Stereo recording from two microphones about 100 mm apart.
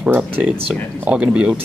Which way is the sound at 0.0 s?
10° right (ahead or behind).